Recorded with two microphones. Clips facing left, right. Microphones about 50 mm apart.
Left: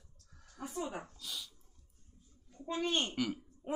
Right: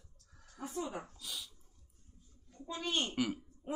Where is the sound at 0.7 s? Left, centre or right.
Centre.